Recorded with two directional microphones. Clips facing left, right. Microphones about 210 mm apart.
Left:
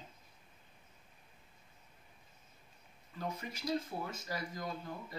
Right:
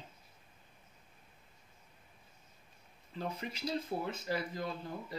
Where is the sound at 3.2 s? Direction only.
25° right (ahead or behind).